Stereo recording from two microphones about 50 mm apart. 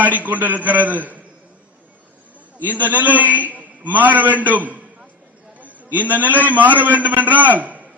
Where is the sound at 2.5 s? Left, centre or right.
Right.